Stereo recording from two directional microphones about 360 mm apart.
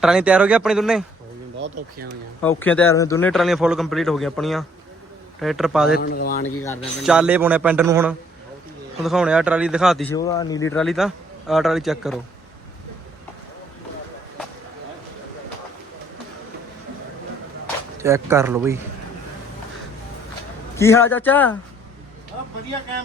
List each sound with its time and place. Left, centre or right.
0.0 s a man's voice: centre
1.5 s speech: right
2.4 s a man's voice: centre
6.0 s speech: left
6.7 s a man's voice: centre
18.0 s speech: centre
20.7 s a man's voice: centre